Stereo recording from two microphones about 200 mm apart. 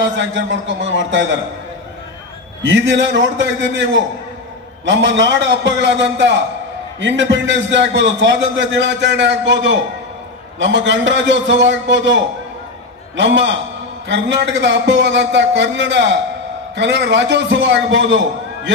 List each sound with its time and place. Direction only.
0.0 s a man's voice: 65° right (ahead or behind)
2.6 s a man's voice: 70° right (ahead or behind)